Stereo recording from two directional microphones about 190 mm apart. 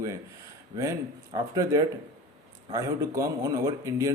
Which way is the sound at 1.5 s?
20° right (ahead or behind).